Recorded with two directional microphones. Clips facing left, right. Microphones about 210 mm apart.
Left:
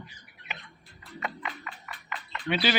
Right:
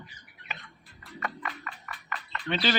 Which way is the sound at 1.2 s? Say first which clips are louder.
Even; 20° left (ahead or behind).